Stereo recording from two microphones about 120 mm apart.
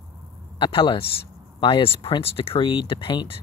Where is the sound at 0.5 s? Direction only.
45° left (ahead or behind).